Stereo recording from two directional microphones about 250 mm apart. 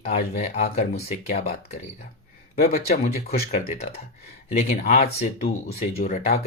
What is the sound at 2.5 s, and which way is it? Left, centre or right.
Speech, left.